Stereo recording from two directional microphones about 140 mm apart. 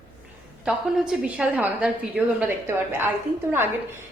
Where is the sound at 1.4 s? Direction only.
10° right (ahead or behind).